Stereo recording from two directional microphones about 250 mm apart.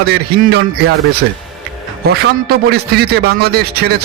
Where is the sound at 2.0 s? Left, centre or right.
Right.